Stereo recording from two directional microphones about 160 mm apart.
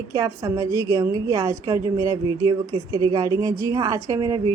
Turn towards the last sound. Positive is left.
turn(degrees=-25)  # may be behind; listen again after turning